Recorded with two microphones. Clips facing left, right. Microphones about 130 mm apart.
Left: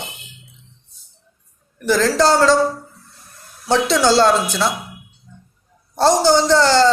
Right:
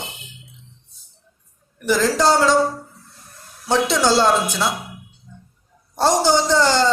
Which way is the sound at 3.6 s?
10° right (ahead or behind).